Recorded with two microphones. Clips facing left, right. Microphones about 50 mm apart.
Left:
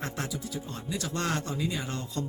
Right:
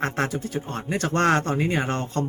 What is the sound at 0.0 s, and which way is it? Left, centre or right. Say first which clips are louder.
Speech: right 9 dB; right.